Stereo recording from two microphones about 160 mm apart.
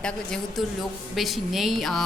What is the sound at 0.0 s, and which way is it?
A woman's voice, centre (ahead or behind).